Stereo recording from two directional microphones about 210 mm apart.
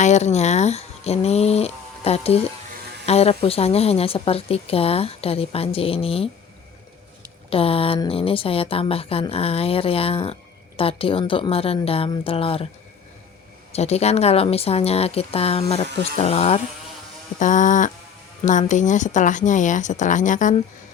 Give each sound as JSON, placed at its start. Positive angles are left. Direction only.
{"t": 0.0, "sound": "a woman's voice", "side_deg": 30}
{"t": 7.5, "sound": "a woman's voice", "side_deg": 25}
{"t": 13.7, "sound": "a woman's voice", "side_deg": 30}